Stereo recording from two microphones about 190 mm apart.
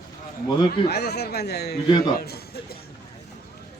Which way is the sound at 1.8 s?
20° left (ahead or behind).